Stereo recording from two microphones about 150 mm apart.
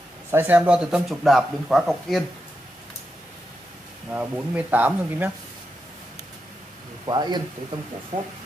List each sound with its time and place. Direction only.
0.3 s speech: 10° right (ahead or behind)
4.1 s speech: 10° right (ahead or behind)
7.1 s speech: 30° right (ahead or behind)